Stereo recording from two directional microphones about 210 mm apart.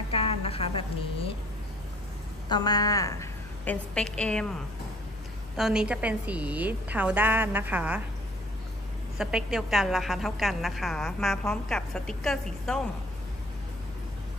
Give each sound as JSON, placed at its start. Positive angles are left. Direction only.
{"t": 0.1, "sound": "a woman's voice", "side_deg": 25}
{"t": 2.5, "sound": "a woman's voice", "side_deg": 20}
{"t": 5.6, "sound": "a woman's voice", "side_deg": -5}
{"t": 9.2, "sound": "a woman's voice", "side_deg": 0}